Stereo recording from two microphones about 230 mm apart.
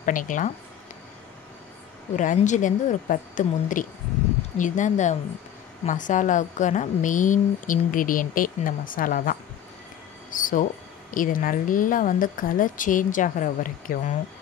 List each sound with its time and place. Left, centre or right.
0.0 s speech: left
2.1 s speech: left